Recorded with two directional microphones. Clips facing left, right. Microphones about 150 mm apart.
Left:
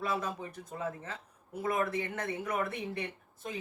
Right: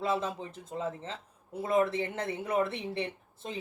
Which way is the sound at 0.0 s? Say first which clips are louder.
Right 3 dB; 25° right (ahead or behind).